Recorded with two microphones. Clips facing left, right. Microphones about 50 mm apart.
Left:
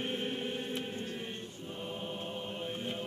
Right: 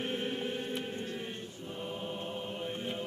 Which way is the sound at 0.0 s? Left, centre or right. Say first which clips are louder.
Right 1 dB; right.